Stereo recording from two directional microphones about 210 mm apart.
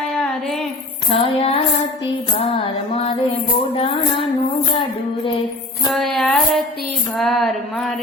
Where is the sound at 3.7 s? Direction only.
25° left (ahead or behind).